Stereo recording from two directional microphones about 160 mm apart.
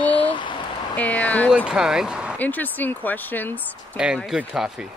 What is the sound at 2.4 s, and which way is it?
Speech, 10° left (ahead or behind).